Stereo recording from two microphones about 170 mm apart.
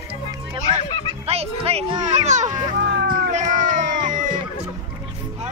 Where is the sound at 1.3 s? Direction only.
35° right (ahead or behind).